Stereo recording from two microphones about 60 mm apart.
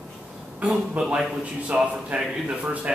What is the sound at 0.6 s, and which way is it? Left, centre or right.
A man's voice, centre.